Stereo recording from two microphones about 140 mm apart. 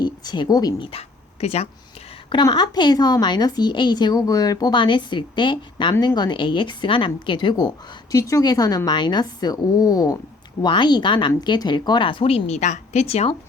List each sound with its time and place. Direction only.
0.0 s speech: 30° left (ahead or behind)
0.9 s bow-wow: 45° left (ahead or behind)
2.3 s a woman's voice: 35° left (ahead or behind); by 13.3 s 50° left (ahead or behind)